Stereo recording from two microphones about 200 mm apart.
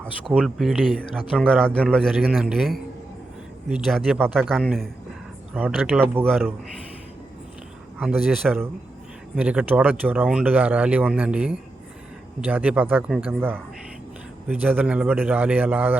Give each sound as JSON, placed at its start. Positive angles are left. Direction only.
{"t": 0.3, "sound": "a man's voice", "side_deg": 0}
{"t": 6.2, "sound": "a man's voice", "side_deg": 5}
{"t": 7.9, "sound": "a man's voice", "side_deg": 0}